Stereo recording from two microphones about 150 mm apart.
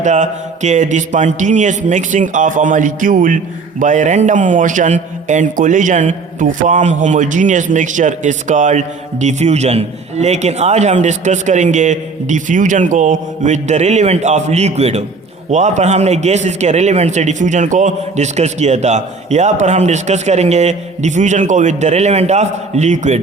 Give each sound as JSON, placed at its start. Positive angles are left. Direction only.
{"t": 0.0, "sound": "a man's voice", "side_deg": -50}